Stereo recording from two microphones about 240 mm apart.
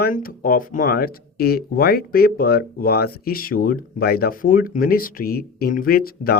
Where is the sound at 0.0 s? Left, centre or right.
Left.